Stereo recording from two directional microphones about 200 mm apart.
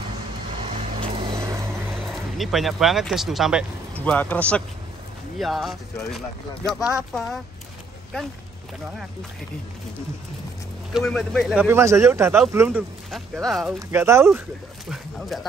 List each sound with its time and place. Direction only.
0.6 s vehicle: 25° right (ahead or behind)
2.3 s a man's voice: centre (ahead or behind)
10.9 s speech: centre (ahead or behind)
11.6 s speech: 15° right (ahead or behind)
13.7 s speech: 15° right (ahead or behind)
14.9 s speech: centre (ahead or behind)